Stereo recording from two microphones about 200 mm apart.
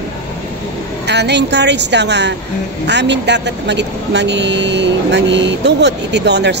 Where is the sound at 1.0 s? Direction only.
60° right (ahead or behind).